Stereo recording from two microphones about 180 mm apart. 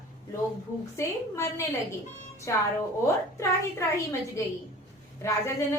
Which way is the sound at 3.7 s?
15° left (ahead or behind).